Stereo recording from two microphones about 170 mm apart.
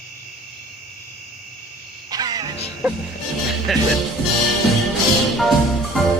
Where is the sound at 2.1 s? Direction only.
25° right (ahead or behind).